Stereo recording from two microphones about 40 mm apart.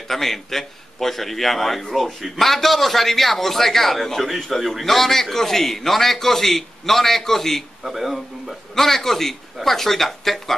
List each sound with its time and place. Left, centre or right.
0.1 s a man's voice: centre
7.8 s a man's voice: centre